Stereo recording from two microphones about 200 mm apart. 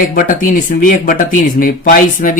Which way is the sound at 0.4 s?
45° left (ahead or behind).